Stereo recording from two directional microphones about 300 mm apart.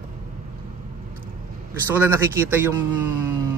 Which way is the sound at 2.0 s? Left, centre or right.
Centre.